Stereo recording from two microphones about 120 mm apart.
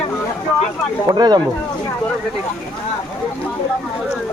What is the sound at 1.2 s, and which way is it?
Speech, 35° right (ahead or behind).